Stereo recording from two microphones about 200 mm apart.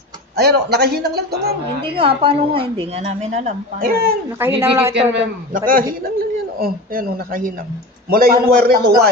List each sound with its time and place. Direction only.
0.4 s speech: 55° right (ahead or behind)
1.8 s a woman's voice: 25° right (ahead or behind)
3.8 s speech: 50° right (ahead or behind)
4.4 s a woman's voice: 10° right (ahead or behind)
5.7 s speech: 45° right (ahead or behind)